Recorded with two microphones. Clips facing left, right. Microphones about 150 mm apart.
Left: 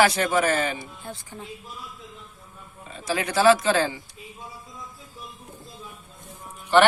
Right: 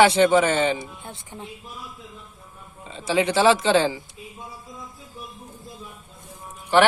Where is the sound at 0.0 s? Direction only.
25° right (ahead or behind).